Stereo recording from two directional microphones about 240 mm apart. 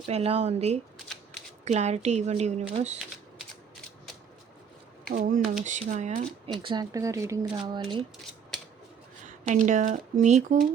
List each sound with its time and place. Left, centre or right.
0.0 s speech: right
5.0 s speech: right; by 8.0 s centre
9.4 s speech: right